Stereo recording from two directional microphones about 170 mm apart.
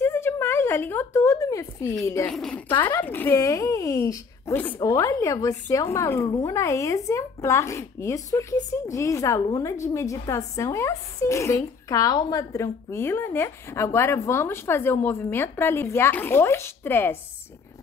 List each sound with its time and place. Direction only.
0.0 s a sound: 15° left (ahead or behind)
2.0 s a woman's voice: 15° left (ahead or behind)
2.3 s speech: 5° left (ahead or behind)
2.7 s speech: 25° left (ahead or behind)
3.1 s a woman's voice: 10° left (ahead or behind)